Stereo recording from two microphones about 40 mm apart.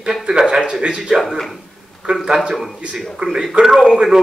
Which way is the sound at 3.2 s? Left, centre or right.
Centre.